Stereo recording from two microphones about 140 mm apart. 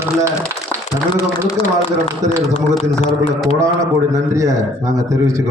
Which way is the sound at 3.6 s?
20° right (ahead or behind).